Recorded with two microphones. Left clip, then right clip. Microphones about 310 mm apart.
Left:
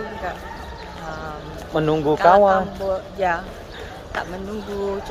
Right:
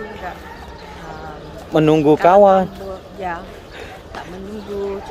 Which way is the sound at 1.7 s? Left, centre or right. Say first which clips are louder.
Right 6 dB; right.